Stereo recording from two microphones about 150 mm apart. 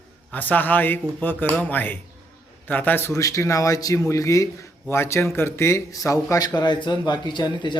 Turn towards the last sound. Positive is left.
turn(degrees=30)  # may be behind; listen again after turning